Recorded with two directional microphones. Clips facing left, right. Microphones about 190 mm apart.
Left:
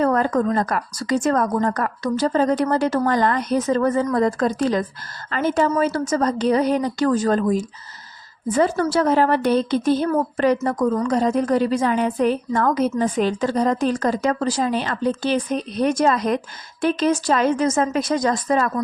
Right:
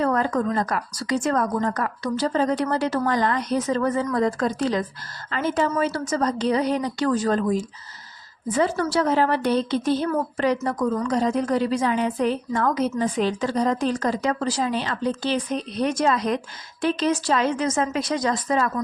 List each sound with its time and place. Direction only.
0.0 s a woman's voice: 45° left (ahead or behind)
8.5 s a woman's voice: 45° left (ahead or behind)